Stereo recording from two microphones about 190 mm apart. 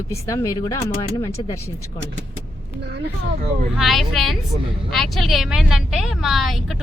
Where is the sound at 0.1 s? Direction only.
15° left (ahead or behind).